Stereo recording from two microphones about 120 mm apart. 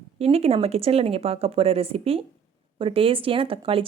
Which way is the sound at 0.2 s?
55° right (ahead or behind).